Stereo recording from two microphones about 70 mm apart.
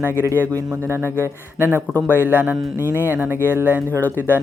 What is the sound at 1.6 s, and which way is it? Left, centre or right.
Speech, right.